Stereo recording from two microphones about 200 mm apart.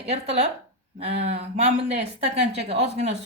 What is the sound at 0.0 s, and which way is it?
Speech, 30° right (ahead or behind).